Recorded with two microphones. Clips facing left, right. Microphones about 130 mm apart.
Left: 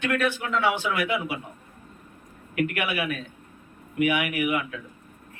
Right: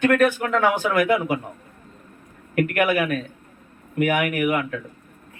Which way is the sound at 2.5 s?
50° right (ahead or behind).